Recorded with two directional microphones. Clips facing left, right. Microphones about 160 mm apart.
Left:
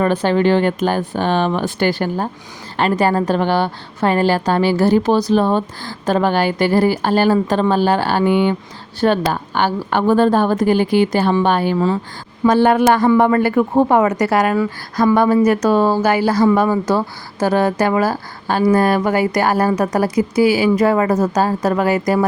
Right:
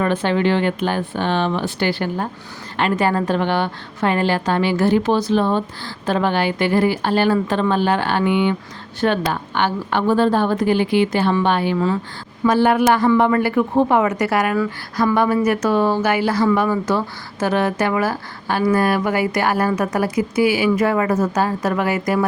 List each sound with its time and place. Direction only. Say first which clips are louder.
0.0 s a woman's voice: left 3 dB; 35° left (ahead or behind)